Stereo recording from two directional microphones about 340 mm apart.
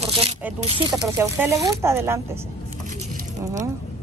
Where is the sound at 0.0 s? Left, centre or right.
Centre.